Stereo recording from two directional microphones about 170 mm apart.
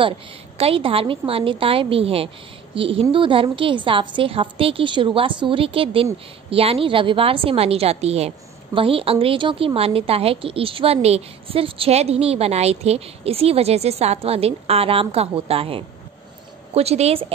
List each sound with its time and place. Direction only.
0.6 s a woman's voice: 35° right (ahead or behind)